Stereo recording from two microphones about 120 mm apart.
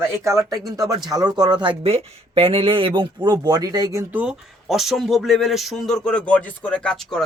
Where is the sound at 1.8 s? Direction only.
55° right (ahead or behind); by 4.0 s 30° right (ahead or behind).